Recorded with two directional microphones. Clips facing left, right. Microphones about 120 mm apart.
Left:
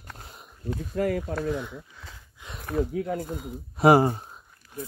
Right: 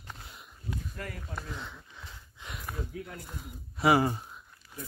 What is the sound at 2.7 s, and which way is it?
Speech, 80° left.